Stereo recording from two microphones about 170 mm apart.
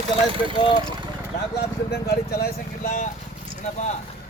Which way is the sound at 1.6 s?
70° left (ahead or behind).